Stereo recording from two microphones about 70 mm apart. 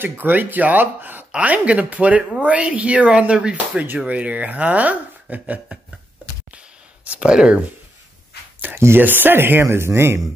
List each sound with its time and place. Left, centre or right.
0.0 s speech: right
7.1 s speech: centre
8.7 s speech: right
9.0 s speech: right